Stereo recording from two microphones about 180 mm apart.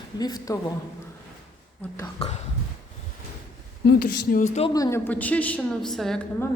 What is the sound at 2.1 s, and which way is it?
Speech, 35° left (ahead or behind).